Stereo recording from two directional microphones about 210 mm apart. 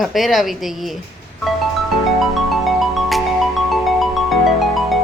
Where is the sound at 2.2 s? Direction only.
Centre (ahead or behind).